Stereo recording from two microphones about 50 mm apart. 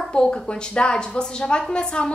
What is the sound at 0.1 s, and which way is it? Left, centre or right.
A woman's voice, centre.